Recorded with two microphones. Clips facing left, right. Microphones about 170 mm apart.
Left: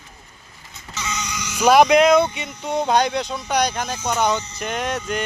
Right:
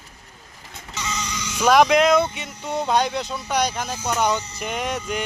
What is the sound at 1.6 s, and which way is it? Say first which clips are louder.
Speech: left 2 dB; centre (ahead or behind).